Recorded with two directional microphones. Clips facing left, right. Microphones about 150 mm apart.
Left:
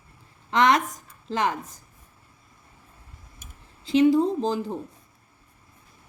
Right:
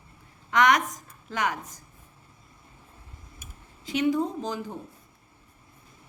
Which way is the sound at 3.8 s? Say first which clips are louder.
Left 6 dB; 30° left (ahead or behind).